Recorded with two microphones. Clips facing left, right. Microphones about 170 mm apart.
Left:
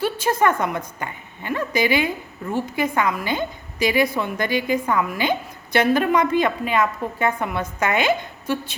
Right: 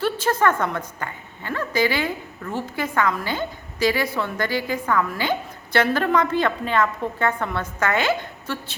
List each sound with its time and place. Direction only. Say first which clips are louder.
0.0 s a woman's voice: left 1 dB; 15° left (ahead or behind)